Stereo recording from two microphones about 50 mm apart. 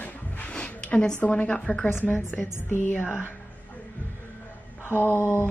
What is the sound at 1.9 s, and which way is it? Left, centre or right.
Speech, left.